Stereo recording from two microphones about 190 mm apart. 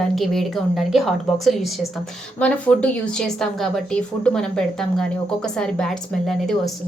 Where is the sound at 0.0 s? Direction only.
Centre (ahead or behind).